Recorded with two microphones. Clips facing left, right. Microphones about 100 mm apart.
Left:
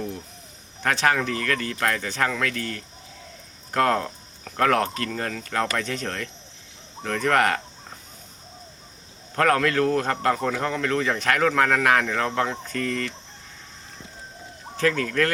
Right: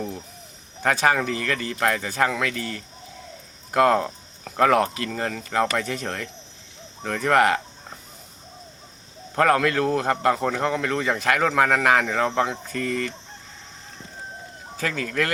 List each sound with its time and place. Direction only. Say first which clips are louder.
0.8 s a man's voice: right 2 dB; 10° right (ahead or behind)
9.3 s a man's voice: right 1 dB; 10° right (ahead or behind)
14.8 s a man's voice: left 3 dB; 5° right (ahead or behind)